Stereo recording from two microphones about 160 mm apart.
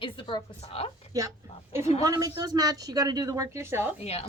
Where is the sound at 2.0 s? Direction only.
20° right (ahead or behind).